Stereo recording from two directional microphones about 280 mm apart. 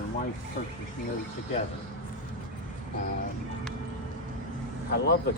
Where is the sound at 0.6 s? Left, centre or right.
Left.